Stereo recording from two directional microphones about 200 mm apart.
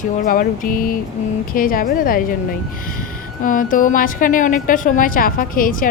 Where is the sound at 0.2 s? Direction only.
40° left (ahead or behind).